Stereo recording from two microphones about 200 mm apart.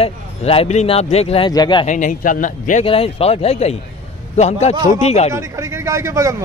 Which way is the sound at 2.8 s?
30° left (ahead or behind).